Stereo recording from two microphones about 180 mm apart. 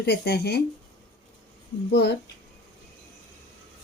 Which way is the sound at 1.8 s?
65° left (ahead or behind).